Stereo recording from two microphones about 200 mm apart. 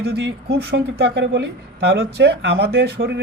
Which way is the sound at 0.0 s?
55° right (ahead or behind).